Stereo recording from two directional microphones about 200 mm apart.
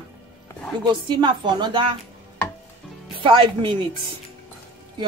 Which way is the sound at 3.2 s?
25° right (ahead or behind).